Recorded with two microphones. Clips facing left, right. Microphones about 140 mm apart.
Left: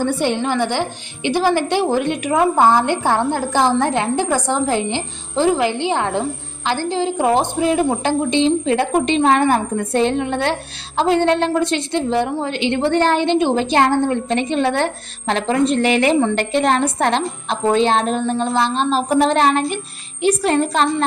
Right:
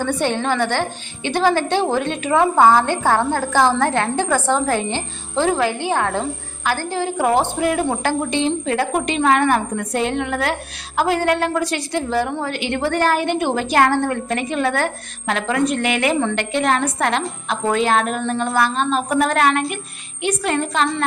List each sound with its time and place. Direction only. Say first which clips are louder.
0.0 s a woman's voice: left 2 dB; 10° left (ahead or behind); by 20.8 s 35° left (ahead or behind)